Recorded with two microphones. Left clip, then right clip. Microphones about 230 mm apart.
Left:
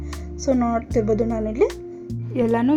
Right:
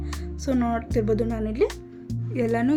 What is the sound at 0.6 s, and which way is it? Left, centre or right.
Speech, centre.